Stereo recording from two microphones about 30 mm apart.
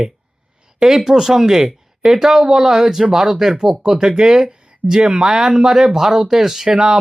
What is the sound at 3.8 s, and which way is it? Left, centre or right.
Speech, centre.